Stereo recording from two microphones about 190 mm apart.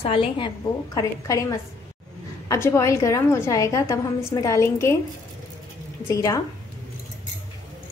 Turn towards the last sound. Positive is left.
turn(degrees=15)  # may be behind; listen again after turning